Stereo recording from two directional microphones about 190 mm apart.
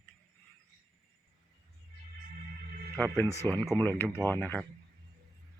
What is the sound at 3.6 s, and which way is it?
Speech, 20° right (ahead or behind).